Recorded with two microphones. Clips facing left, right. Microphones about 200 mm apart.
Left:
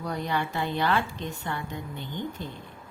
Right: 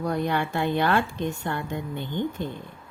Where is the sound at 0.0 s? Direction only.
55° right (ahead or behind).